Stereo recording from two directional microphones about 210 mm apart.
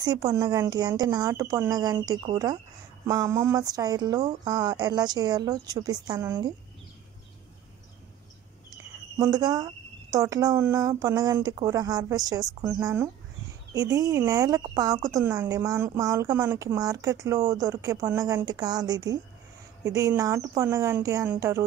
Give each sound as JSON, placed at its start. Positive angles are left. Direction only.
{"t": 0.0, "sound": "speech", "side_deg": -15}
{"t": 9.2, "sound": "speech", "side_deg": -20}